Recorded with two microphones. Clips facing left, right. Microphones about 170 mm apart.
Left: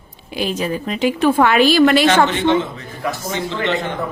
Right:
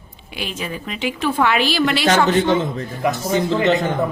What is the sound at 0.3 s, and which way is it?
A woman's voice, 40° left (ahead or behind).